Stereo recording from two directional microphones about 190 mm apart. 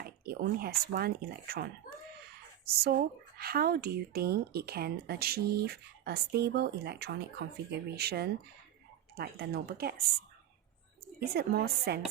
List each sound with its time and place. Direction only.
0.0 s speech: 55° right (ahead or behind)
2.8 s speech: 55° right (ahead or behind)
11.2 s speech: 55° right (ahead or behind)